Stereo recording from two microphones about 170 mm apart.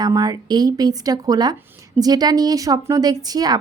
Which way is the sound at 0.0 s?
20° right (ahead or behind).